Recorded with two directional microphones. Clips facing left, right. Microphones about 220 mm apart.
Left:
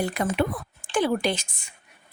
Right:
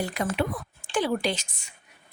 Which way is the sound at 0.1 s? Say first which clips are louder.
Left 3 dB; 55° left (ahead or behind).